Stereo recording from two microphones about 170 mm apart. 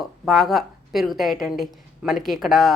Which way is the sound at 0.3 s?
Centre (ahead or behind).